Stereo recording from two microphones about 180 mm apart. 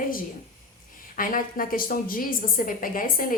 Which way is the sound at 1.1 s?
50° left (ahead or behind).